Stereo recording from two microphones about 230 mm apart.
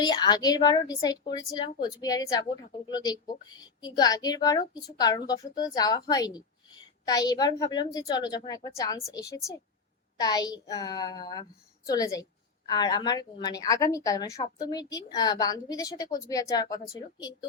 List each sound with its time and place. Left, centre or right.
0.0 s a woman's voice: centre